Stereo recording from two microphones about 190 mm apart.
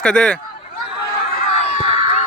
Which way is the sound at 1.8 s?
30° right (ahead or behind).